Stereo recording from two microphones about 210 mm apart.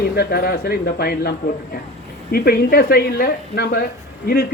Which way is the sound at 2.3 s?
45° left (ahead or behind).